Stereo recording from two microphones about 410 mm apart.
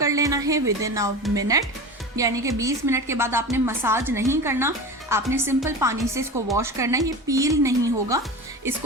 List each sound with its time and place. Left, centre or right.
0.0 s music: centre
0.8 s a woman's voice: centre